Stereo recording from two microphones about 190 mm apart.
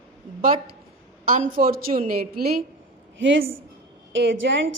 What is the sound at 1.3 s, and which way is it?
A woman's voice, 45° right (ahead or behind).